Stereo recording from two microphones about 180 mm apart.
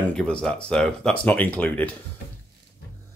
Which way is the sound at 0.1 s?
5° left (ahead or behind).